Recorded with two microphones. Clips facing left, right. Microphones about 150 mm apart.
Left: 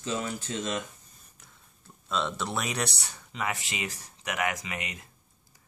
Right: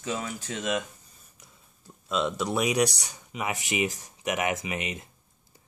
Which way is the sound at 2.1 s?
10° right (ahead or behind).